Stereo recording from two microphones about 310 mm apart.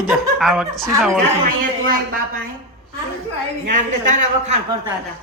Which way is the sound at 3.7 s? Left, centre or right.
Right.